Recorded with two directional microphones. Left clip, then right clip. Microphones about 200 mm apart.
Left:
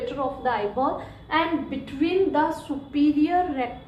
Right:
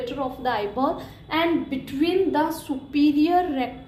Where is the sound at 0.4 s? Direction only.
40° right (ahead or behind).